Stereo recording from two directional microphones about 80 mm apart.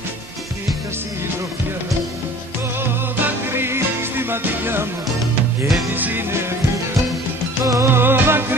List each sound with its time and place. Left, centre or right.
2.8 s music: right
5.9 s music: right
7.6 s music: right
7.9 s music: right